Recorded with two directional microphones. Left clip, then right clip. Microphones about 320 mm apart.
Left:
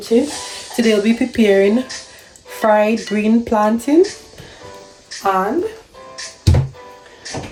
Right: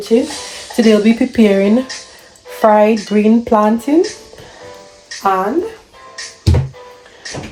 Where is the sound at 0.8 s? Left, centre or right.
Centre.